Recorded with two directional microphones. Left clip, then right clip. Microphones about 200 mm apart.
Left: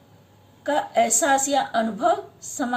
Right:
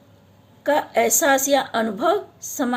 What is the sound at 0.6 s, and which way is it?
A woman's voice, 40° right (ahead or behind).